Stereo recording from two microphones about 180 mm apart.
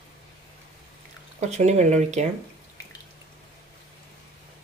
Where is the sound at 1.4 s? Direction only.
40° right (ahead or behind).